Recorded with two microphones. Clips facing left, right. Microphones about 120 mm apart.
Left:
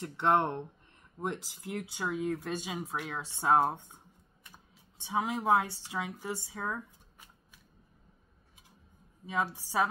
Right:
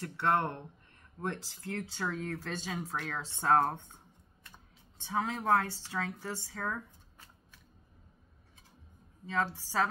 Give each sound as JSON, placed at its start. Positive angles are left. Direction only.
{"t": 0.0, "sound": "a woman's voice", "side_deg": 20}
{"t": 9.2, "sound": "speech", "side_deg": 15}